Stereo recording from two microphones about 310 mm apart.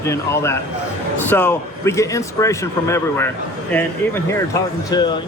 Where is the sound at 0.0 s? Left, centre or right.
Centre.